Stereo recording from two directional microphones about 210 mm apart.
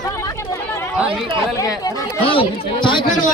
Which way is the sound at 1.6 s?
20° left (ahead or behind).